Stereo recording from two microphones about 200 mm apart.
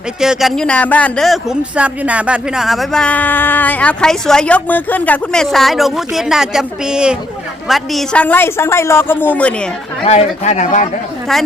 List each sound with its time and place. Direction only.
0.2 s a woman's voice: centre (ahead or behind)
10.0 s speech: 30° left (ahead or behind)